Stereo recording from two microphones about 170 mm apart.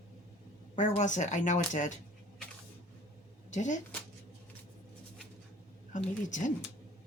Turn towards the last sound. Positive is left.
turn(degrees=45)  # may be behind; listen again after turning